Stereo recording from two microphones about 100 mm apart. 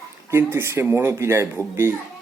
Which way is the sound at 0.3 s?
25° right (ahead or behind).